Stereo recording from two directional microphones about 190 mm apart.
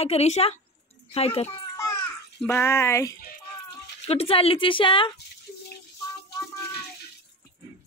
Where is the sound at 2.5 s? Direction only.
15° left (ahead or behind).